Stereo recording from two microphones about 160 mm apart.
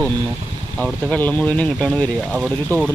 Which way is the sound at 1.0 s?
10° left (ahead or behind).